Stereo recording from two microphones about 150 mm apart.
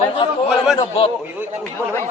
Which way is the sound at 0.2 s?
35° left (ahead or behind).